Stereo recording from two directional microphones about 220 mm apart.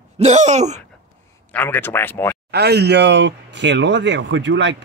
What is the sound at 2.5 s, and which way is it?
Speech, 50° right (ahead or behind).